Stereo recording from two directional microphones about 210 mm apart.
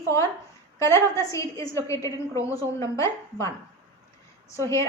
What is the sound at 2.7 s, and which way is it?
Speech, 15° left (ahead or behind).